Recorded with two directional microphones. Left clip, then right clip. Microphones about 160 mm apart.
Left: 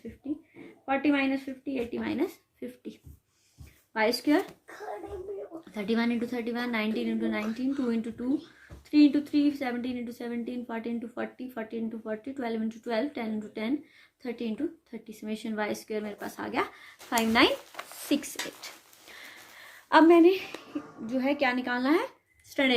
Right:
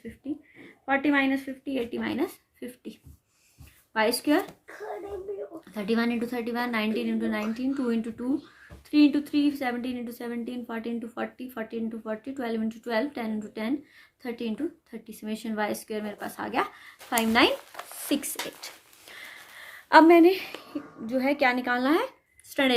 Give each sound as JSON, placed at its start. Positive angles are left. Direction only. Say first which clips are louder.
{"t": 0.9, "sound": "a woman's voice", "louder": "right 3 dB", "side_deg": -30}
{"t": 5.7, "sound": "a woman's voice", "louder": "right 2 dB", "side_deg": -35}